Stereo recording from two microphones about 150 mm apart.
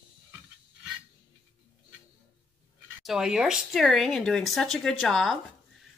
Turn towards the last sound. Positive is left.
turn(degrees=0)  # may be behind; listen again after turning